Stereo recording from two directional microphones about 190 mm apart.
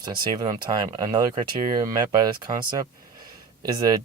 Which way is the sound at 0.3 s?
25° right (ahead or behind).